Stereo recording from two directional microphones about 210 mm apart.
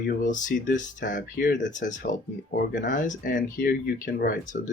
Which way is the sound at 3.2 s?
40° left (ahead or behind).